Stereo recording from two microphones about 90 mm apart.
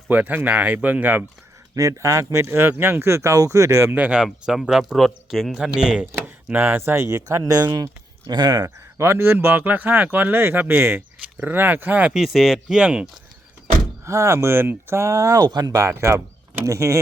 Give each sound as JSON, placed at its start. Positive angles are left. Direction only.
{"t": 0.1, "sound": "speech", "side_deg": -20}
{"t": 1.7, "sound": "speech", "side_deg": -40}
{"t": 3.9, "sound": "speech", "side_deg": -15}
{"t": 6.1, "sound": "chopping", "side_deg": -25}
{"t": 7.3, "sound": "speech", "side_deg": -40}
{"t": 12.1, "sound": "speech", "side_deg": -5}
{"t": 14.0, "sound": "speech", "side_deg": -35}